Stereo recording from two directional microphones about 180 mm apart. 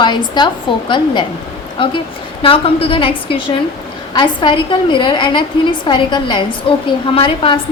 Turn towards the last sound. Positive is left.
turn(degrees=30)  # may be behind; listen again after turning